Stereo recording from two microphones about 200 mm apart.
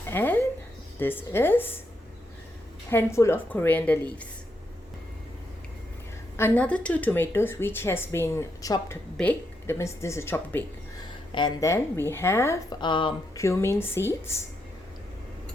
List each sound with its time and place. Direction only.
0.1 s speech: 10° left (ahead or behind)
2.9 s speech: 10° left (ahead or behind)
6.3 s speech: 10° left (ahead or behind)
13.4 s speech: 15° left (ahead or behind)